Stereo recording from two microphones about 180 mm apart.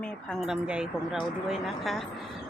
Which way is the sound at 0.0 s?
5° left (ahead or behind).